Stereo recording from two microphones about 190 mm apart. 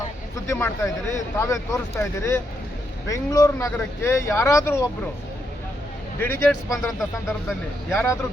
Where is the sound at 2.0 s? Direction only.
15° left (ahead or behind).